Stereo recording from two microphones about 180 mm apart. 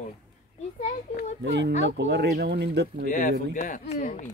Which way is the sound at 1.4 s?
75° right (ahead or behind).